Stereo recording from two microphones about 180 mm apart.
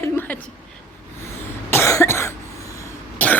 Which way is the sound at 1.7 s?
15° left (ahead or behind).